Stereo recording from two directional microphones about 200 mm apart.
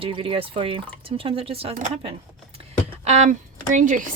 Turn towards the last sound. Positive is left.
turn(degrees=-40)  # may be behind; listen again after turning